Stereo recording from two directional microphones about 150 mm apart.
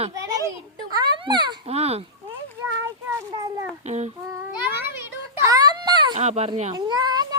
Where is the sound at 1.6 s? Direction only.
45° right (ahead or behind).